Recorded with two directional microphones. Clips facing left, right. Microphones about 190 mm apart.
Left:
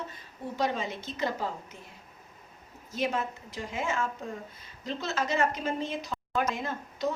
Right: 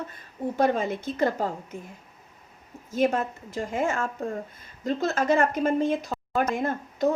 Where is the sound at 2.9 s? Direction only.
50° right (ahead or behind).